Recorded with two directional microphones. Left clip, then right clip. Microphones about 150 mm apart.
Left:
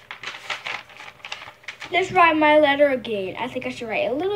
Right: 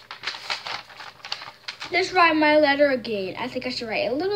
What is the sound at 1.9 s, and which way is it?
A woman's voice, 15° right (ahead or behind).